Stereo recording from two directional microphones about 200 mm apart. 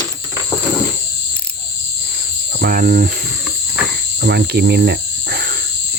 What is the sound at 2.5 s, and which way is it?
Cricket, 45° right (ahead or behind).